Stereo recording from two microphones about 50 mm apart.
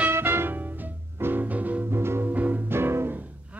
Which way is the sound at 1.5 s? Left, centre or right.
Right.